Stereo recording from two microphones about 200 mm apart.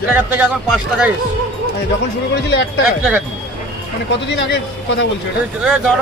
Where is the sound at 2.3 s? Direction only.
60° left (ahead or behind).